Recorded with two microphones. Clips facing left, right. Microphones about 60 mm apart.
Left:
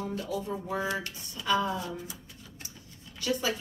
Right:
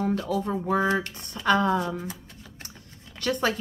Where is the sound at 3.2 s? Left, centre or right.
Right.